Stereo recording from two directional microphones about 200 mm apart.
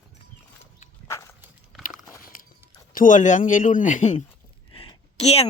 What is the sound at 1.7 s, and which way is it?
Biting, centre (ahead or behind).